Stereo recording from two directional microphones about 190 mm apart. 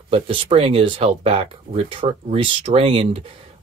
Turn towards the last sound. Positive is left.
turn(degrees=-30)  # may be behind; listen again after turning